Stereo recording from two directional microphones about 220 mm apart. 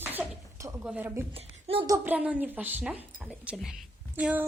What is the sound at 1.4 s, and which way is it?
Speech, 25° right (ahead or behind).